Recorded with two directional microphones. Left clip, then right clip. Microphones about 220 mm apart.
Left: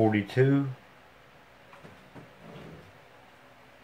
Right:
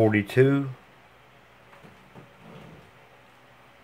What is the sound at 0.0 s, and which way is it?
Speech, 35° right (ahead or behind).